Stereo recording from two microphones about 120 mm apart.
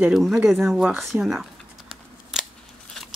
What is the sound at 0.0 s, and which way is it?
Speech, 5° right (ahead or behind).